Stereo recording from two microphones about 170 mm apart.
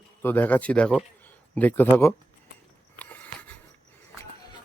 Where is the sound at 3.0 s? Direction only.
10° left (ahead or behind).